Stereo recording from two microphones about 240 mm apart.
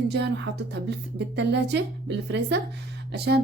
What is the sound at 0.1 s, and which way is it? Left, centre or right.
Speech, right.